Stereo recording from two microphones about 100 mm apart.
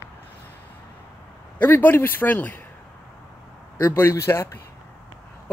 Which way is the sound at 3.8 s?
25° left (ahead or behind).